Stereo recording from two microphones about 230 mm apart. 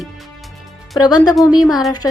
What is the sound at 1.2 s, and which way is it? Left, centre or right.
Speech, centre.